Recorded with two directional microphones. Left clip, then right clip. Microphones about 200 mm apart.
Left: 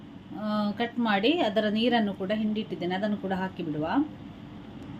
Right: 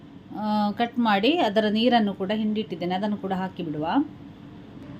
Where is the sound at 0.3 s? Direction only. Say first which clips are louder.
Right 5 dB; 25° right (ahead or behind).